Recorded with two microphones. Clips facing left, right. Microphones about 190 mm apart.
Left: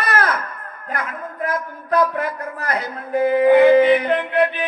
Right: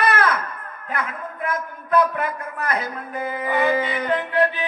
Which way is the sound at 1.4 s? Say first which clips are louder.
Left 2 dB; 35° left (ahead or behind).